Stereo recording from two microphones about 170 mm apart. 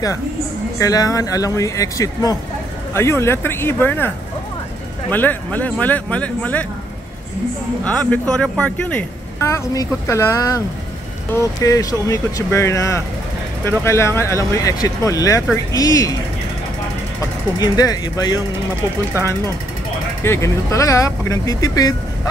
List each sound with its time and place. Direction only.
0.7 s speech: 20° left (ahead or behind)
5.1 s speech: 10° left (ahead or behind)
7.8 s speech: 5° left (ahead or behind)
11.6 s speech: 20° left (ahead or behind)
17.6 s speech: 20° left (ahead or behind)
20.2 s speech: 15° left (ahead or behind)